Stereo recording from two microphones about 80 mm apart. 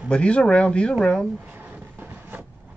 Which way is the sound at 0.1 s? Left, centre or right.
Centre.